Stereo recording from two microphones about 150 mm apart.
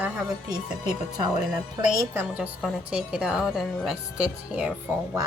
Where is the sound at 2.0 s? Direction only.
10° right (ahead or behind).